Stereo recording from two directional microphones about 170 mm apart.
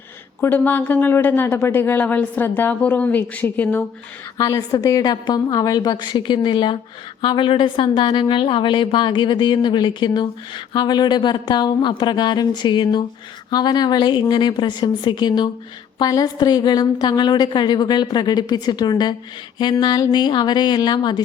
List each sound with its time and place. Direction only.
0.4 s a woman's voice: 10° left (ahead or behind)